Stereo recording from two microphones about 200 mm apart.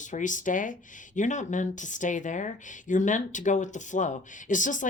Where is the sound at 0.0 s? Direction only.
40° left (ahead or behind).